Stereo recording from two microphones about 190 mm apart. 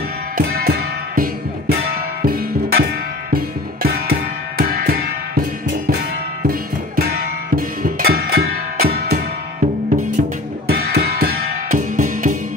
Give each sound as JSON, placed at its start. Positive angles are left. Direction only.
{"t": 0.4, "sound": "music", "side_deg": -55}
{"t": 7.0, "sound": "music", "side_deg": -50}